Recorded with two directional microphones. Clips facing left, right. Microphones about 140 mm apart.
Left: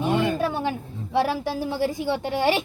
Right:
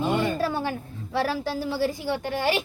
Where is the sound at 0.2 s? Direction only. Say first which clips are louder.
Left 2 dB; 15° left (ahead or behind).